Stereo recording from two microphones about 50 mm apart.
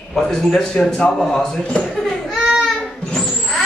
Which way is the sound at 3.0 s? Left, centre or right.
Centre.